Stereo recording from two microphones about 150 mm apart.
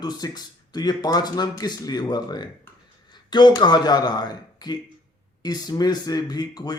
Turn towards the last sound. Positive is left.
turn(degrees=25)  # may be behind; listen again after turning